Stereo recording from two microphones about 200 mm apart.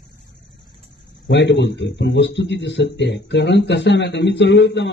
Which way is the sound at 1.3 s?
60° left (ahead or behind).